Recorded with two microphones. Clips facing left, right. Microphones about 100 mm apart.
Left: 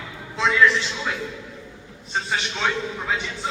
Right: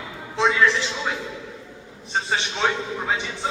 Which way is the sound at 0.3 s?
25° right (ahead or behind).